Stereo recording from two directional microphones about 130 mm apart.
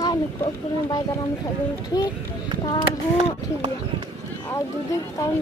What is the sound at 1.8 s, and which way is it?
Speech, 30° left (ahead or behind).